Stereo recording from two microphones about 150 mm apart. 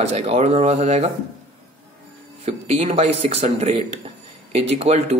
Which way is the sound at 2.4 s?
45° right (ahead or behind).